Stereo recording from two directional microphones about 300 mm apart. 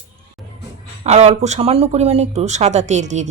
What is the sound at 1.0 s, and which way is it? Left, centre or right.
Speech, right.